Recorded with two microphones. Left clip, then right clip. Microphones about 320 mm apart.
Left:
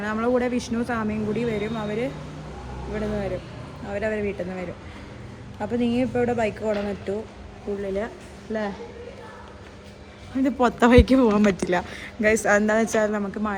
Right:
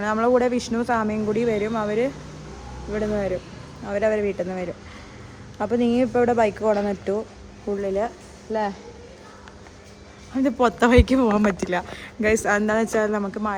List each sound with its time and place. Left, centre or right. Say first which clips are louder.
0.0 s speech: right 4 dB; centre
10.3 s speech: right 1 dB; centre